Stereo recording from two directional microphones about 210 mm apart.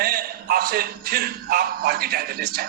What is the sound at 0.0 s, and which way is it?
A man's voice, 45° right (ahead or behind).